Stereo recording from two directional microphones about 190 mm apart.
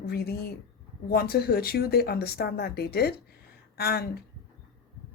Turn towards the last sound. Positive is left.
turn(degrees=55)  # may be behind; listen again after turning